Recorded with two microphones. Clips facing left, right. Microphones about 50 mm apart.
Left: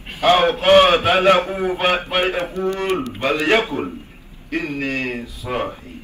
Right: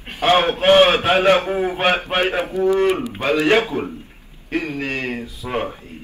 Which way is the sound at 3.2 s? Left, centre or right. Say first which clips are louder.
Right 1 dB; left.